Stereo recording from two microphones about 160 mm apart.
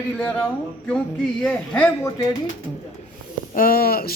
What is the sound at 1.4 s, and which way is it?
Speech, 5° left (ahead or behind).